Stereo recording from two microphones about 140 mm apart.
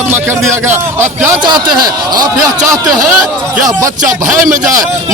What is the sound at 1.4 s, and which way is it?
Speech, 30° right (ahead or behind).